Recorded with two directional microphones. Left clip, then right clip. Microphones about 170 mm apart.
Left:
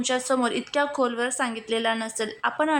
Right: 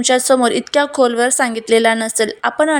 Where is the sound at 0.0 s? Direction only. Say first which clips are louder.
Right 11 dB; 35° right (ahead or behind).